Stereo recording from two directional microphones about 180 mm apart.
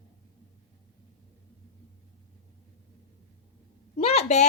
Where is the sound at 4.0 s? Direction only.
35° left (ahead or behind).